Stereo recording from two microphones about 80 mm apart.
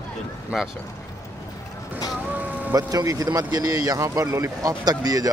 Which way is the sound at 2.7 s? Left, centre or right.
Right.